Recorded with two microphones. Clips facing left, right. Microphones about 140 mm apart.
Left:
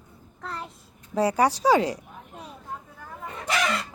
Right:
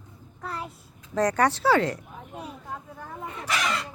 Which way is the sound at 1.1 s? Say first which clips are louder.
Left 1 dB; 10° left (ahead or behind).